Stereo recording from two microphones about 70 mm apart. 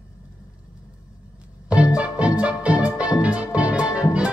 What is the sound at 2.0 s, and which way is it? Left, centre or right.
Music, centre.